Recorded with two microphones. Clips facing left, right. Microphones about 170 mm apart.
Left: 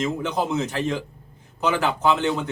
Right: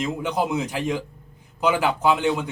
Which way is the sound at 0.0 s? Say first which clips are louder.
Even; 10° right (ahead or behind).